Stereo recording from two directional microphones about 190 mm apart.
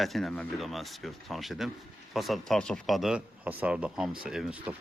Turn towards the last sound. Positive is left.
turn(degrees=-5)  # may be behind; listen again after turning